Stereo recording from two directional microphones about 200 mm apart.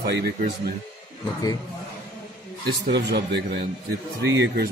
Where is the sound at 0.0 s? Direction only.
50° right (ahead or behind).